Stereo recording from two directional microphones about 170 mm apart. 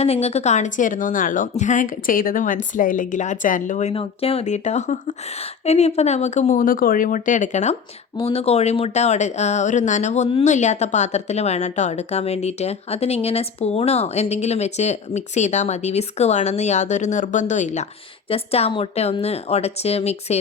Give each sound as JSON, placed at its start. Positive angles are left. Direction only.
{"t": 0.0, "sound": "a woman's voice", "side_deg": 35}